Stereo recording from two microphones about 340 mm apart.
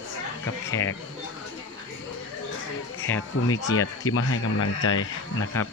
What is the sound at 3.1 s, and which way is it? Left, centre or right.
Speech, centre.